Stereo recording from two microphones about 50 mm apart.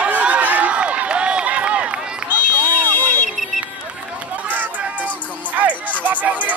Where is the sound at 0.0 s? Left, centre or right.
Right.